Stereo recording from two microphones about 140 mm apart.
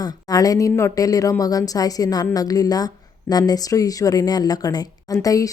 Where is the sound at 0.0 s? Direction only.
25° left (ahead or behind).